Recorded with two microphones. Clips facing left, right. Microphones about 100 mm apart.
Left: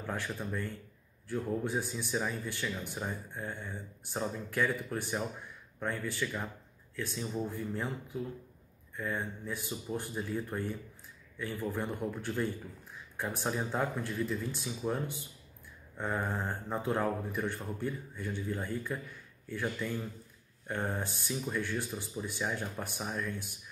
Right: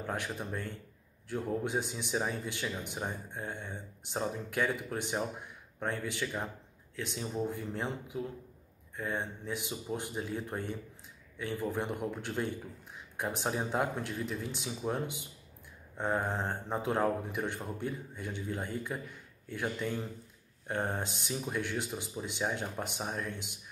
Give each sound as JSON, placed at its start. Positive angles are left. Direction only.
{"t": 0.0, "sound": "speech", "side_deg": -20}